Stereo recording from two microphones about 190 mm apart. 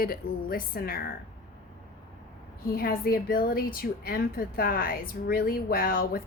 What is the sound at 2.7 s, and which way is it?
A woman's voice, 50° left (ahead or behind).